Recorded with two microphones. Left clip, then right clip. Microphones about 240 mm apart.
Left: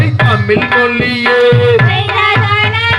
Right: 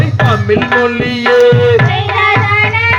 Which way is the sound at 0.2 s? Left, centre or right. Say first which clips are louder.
Even; left.